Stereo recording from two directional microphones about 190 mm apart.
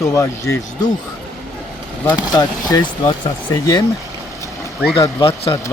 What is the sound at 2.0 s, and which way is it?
Speech, 20° left (ahead or behind).